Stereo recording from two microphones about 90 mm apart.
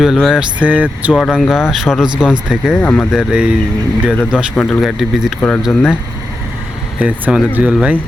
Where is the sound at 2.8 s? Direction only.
10° left (ahead or behind).